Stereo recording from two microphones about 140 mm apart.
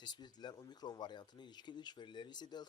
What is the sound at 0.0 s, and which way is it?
A man's voice, 30° left (ahead or behind).